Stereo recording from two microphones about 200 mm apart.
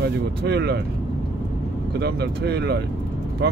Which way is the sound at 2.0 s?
55° right (ahead or behind).